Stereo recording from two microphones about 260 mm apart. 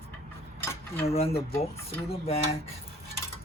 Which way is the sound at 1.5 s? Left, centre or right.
Centre.